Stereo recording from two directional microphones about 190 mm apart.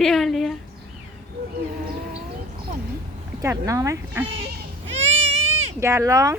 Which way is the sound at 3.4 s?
15° right (ahead or behind).